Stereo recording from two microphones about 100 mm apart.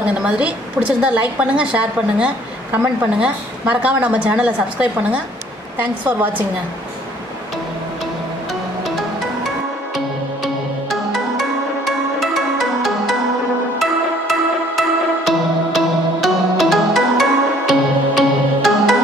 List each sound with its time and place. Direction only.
0.0 s a woman's voice: 10° right (ahead or behind)
9.9 s music: centre (ahead or behind)
14.8 s music: centre (ahead or behind)